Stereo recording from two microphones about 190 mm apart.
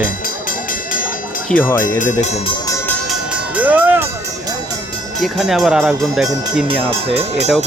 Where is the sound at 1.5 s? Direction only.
10° left (ahead or behind).